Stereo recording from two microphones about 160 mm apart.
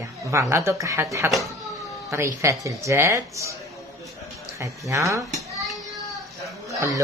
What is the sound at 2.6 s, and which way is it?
Speech, 20° right (ahead or behind).